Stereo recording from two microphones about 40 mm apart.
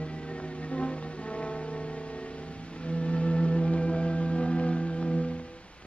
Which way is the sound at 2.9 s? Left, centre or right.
Left.